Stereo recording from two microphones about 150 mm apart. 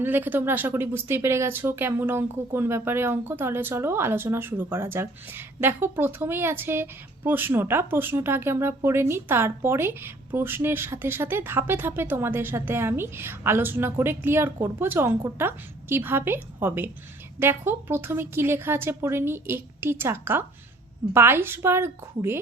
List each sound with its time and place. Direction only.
0.0 s speech: 15° right (ahead or behind)